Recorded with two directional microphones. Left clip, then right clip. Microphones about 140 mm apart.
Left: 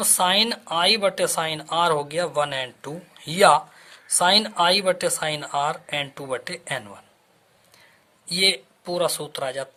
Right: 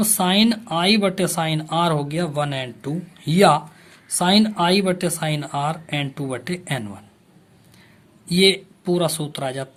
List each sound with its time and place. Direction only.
0.0 s speech: 30° left (ahead or behind)
8.3 s speech: 20° left (ahead or behind)